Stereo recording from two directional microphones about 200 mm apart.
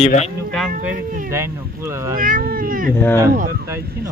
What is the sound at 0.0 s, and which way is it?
Speech, 35° left (ahead or behind).